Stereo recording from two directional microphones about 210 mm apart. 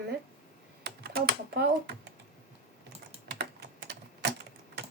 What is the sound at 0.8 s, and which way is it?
Typing, 50° right (ahead or behind).